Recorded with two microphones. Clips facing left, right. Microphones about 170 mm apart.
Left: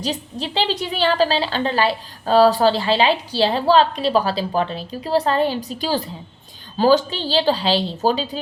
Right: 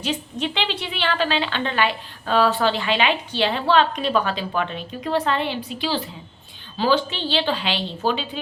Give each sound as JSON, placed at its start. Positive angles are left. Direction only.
{"t": 0.0, "sound": "a woman's voice", "side_deg": 35}